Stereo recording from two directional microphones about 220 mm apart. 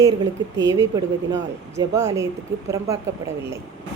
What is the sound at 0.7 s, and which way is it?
Speech, 15° right (ahead or behind).